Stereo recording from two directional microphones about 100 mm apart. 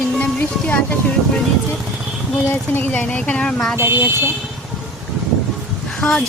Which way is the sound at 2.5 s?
20° left (ahead or behind).